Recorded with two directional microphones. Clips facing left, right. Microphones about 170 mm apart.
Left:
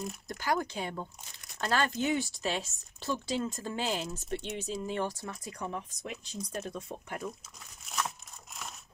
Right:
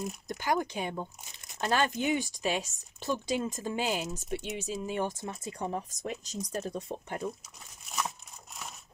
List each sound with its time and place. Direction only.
0.3 s speech: 20° right (ahead or behind)
5.7 s speech: 40° right (ahead or behind)